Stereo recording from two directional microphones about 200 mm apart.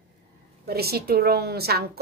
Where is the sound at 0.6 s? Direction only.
50° right (ahead or behind).